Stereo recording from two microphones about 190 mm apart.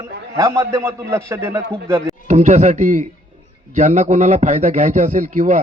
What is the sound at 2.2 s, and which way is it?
A man's voice, 35° right (ahead or behind).